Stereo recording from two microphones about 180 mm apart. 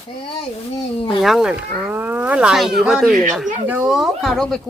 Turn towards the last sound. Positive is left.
turn(degrees=0)  # may be behind; listen again after turning